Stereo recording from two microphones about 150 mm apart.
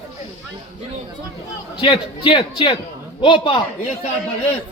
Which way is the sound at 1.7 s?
35° left (ahead or behind).